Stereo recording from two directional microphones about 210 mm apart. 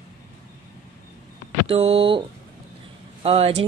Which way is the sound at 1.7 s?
25° right (ahead or behind).